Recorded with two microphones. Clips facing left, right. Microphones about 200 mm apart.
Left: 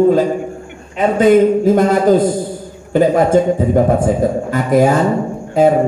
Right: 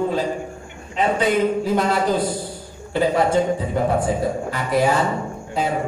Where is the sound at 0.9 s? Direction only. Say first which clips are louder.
Left 9 dB; 45° left (ahead or behind).